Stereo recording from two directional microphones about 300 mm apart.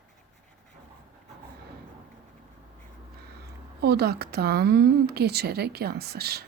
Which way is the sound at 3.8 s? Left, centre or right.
Right.